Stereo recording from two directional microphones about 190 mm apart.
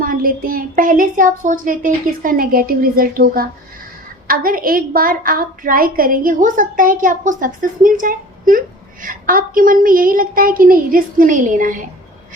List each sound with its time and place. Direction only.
0.0 s a woman's voice: 50° right (ahead or behind)